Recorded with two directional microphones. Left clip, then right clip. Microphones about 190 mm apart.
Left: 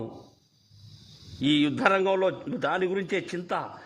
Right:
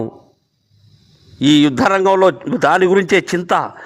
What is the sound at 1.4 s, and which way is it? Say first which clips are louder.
A man's voice: right 12 dB; 40° right (ahead or behind).